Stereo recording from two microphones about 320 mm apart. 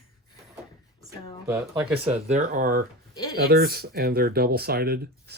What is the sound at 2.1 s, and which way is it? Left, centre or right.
Speech, right.